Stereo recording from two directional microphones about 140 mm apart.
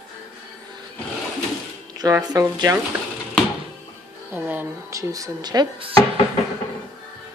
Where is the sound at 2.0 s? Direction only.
30° right (ahead or behind).